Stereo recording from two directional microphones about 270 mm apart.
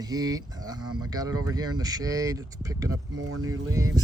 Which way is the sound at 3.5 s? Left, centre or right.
Centre.